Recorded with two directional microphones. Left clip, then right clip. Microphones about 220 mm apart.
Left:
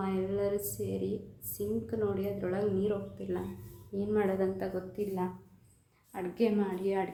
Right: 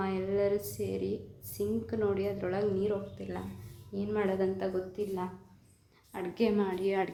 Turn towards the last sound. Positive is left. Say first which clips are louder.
# right 2 dB
turn(degrees=-10)  # may be behind; listen again after turning